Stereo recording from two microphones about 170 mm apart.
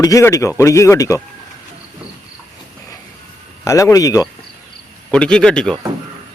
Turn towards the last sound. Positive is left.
turn(degrees=5)  # may be behind; listen again after turning